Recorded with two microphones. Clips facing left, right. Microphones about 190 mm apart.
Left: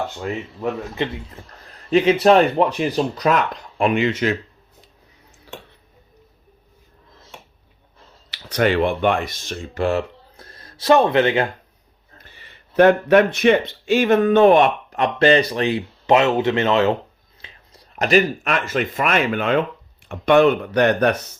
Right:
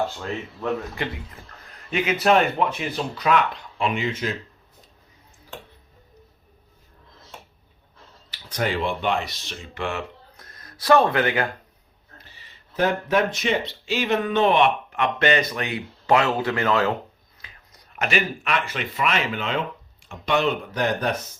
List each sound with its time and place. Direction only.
1.0 s speech: 20° left (ahead or behind)
1.6 s speech: 35° left (ahead or behind); by 4.4 s 70° left (ahead or behind)
8.3 s speech: 75° left (ahead or behind); by 11.4 s 25° left (ahead or behind)
12.1 s speech: 55° left (ahead or behind)